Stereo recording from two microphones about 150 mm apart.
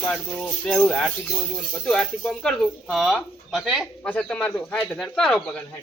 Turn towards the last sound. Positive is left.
turn(degrees=5)  # may be behind; listen again after turning